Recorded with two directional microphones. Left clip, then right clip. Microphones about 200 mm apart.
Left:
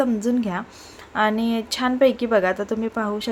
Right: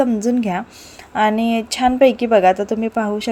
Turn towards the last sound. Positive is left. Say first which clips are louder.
# right 5 dB
turn(degrees=-15)  # may be behind; listen again after turning